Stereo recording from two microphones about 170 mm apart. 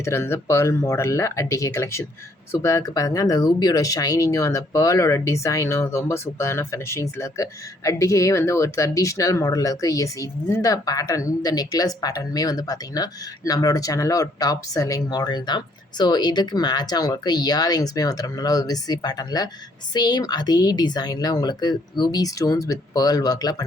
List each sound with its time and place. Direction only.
0.0 s speech: 15° left (ahead or behind)